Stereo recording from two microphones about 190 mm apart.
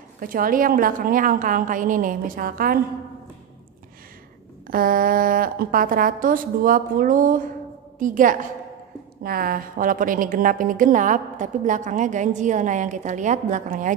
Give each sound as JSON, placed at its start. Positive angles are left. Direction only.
{"t": 0.2, "sound": "a woman's voice", "side_deg": -45}
{"t": 4.6, "sound": "a woman's voice", "side_deg": -50}